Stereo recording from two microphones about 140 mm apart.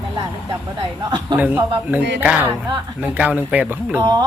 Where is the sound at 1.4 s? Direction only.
10° right (ahead or behind).